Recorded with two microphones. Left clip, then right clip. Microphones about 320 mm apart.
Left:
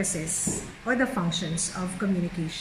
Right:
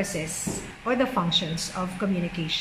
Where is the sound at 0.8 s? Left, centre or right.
Centre.